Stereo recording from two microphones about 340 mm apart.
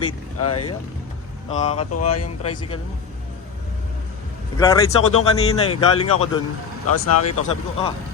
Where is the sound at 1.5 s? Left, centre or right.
Centre.